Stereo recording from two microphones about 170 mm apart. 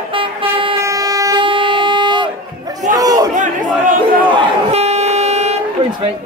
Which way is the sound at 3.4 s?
50° right (ahead or behind).